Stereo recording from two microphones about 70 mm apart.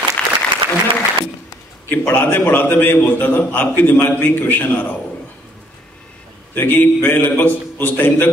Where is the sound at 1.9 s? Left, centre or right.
Left.